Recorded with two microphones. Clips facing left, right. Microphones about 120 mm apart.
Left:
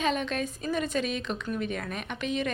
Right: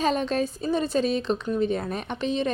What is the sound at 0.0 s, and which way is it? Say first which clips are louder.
A woman's voice: right 5 dB; 35° right (ahead or behind).